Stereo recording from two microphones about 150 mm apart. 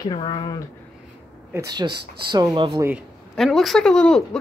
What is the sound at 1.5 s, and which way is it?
Speech, 25° right (ahead or behind).